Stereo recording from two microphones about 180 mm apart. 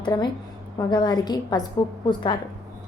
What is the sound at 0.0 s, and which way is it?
A woman's voice, 25° left (ahead or behind).